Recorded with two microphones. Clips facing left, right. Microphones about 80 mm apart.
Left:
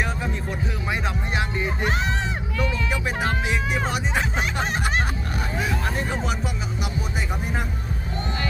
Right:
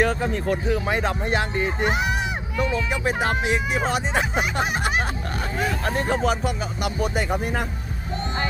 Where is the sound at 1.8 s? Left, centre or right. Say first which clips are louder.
Right 2 dB; centre.